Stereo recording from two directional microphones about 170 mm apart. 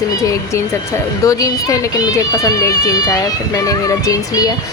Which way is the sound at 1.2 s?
20° left (ahead or behind).